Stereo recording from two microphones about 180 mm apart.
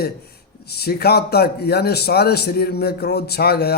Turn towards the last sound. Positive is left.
turn(degrees=60)  # may be behind; listen again after turning